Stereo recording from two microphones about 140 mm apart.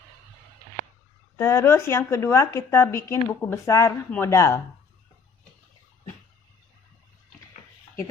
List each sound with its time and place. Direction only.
1.4 s speech: 20° left (ahead or behind)